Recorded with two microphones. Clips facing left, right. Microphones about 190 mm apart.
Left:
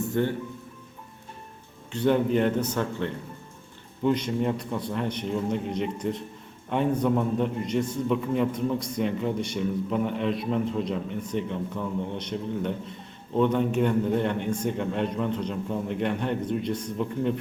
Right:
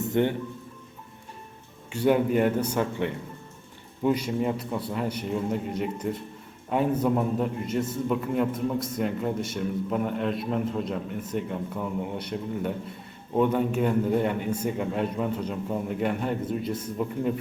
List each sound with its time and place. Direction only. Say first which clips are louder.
0.0 s speech: right 2 dB; 20° right (ahead or behind)
1.9 s a man's voice: even; 10° right (ahead or behind)